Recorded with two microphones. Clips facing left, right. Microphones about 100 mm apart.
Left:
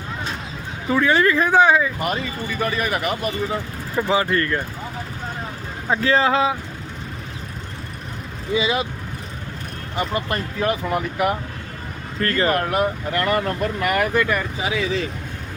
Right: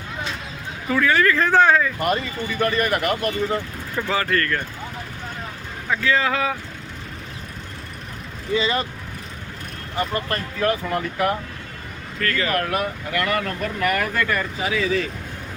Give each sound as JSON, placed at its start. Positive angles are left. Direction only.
{"t": 0.9, "sound": "speech", "side_deg": 25}
{"t": 2.0, "sound": "speech", "side_deg": 0}
{"t": 4.1, "sound": "speech", "side_deg": 20}
{"t": 5.9, "sound": "speech", "side_deg": 30}
{"t": 8.5, "sound": "speech", "side_deg": 10}
{"t": 9.9, "sound": "speech", "side_deg": 20}
{"t": 12.2, "sound": "speech", "side_deg": 30}